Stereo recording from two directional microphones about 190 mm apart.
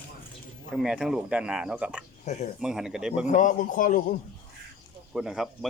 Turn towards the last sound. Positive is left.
turn(degrees=0)  # may be behind; listen again after turning